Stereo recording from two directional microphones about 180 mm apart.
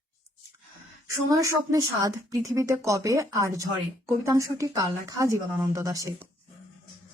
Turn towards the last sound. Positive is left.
turn(degrees=-20)  # may be behind; listen again after turning